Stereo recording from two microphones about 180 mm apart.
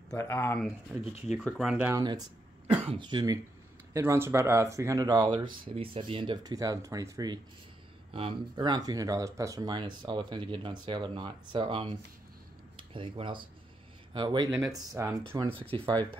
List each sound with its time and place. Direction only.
0.1 s speech: 15° left (ahead or behind)
1.4 s speech: 5° right (ahead or behind)
2.0 s speech: 20° right (ahead or behind)
3.9 s speech: 15° right (ahead or behind)
15.3 s speech: 30° right (ahead or behind)